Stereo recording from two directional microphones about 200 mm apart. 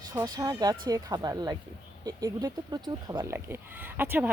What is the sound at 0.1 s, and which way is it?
Speech, 20° right (ahead or behind).